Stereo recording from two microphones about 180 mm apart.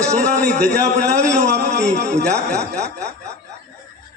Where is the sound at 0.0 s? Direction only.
15° right (ahead or behind).